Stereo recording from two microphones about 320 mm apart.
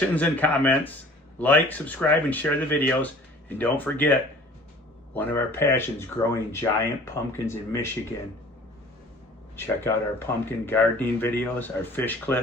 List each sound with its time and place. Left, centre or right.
0.0 s speech: centre
9.6 s speech: centre